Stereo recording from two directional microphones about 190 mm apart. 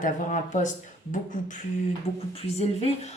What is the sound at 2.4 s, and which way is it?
Speech, 35° left (ahead or behind).